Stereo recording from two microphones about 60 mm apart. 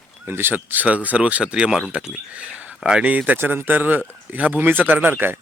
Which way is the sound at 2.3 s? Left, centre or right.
Right.